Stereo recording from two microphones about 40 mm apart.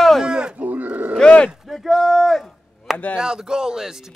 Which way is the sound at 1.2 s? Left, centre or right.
Left.